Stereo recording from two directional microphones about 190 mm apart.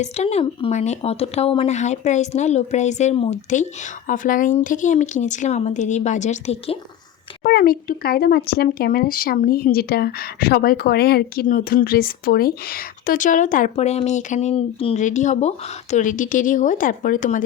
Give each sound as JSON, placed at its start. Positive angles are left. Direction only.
{"t": 0.0, "sound": "speech", "side_deg": 35}
{"t": 7.4, "sound": "speech", "side_deg": 50}